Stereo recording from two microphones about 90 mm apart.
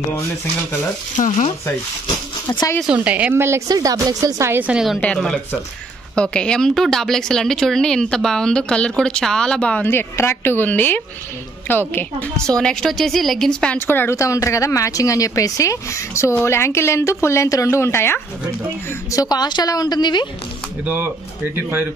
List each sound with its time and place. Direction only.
2.9 s a woman's voice: 15° right (ahead or behind)
3.3 s speech: 30° right (ahead or behind)
3.6 s speech: 45° right (ahead or behind)
4.5 s speech: 20° right (ahead or behind)
4.7 s a woman's voice: 5° right (ahead or behind)
5.0 s speech: 10° left (ahead or behind)
9.8 s a woman's voice: 25° left (ahead or behind)
12.4 s a woman's voice: 5° left (ahead or behind)
13.7 s a woman's voice: 25° left (ahead or behind)
14.1 s a woman's voice: 35° left (ahead or behind)
19.1 s a woman's voice: 50° left (ahead or behind)
20.8 s speech: 25° right (ahead or behind)